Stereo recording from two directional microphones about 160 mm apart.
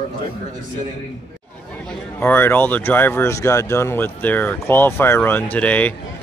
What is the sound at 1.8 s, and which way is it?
Speech, 15° left (ahead or behind).